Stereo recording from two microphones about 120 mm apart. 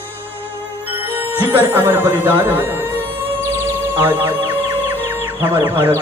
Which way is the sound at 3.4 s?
20° right (ahead or behind).